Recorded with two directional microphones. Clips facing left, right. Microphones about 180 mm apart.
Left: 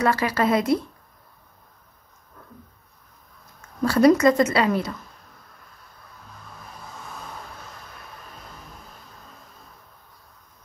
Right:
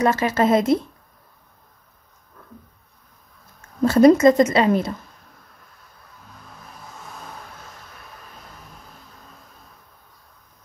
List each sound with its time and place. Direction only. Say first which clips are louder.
0.0 s a woman's voice: right 3 dB; 20° right (ahead or behind)
3.8 s a woman's voice: right 4 dB; 25° right (ahead or behind)